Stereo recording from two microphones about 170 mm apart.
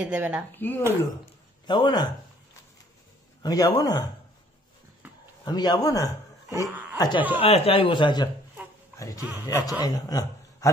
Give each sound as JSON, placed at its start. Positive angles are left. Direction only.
{"t": 0.0, "sound": "speech", "side_deg": -10}
{"t": 0.5, "sound": "speech", "side_deg": 10}
{"t": 1.7, "sound": "a man's voice", "side_deg": 25}
{"t": 3.4, "sound": "a man's voice", "side_deg": 20}
{"t": 5.0, "sound": "a sound", "side_deg": -10}
{"t": 5.4, "sound": "a man's voice", "side_deg": 25}